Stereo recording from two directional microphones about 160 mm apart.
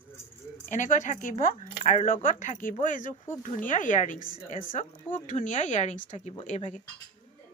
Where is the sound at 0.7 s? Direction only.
50° left (ahead or behind).